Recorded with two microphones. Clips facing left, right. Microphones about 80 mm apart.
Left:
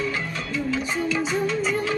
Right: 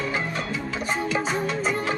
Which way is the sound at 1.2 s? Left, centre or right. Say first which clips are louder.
Left 1 dB; right.